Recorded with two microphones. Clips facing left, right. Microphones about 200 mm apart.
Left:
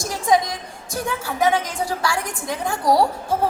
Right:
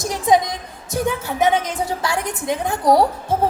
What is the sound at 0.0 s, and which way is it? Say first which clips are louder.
A woman's voice: right 2 dB; 20° right (ahead or behind).